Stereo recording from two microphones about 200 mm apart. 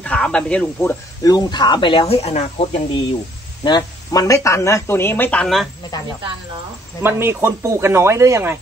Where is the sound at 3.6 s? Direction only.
20° left (ahead or behind); by 5.7 s 5° left (ahead or behind).